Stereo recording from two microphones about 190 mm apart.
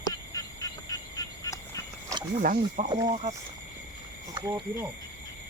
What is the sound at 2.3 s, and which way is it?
Speech, 45° right (ahead or behind).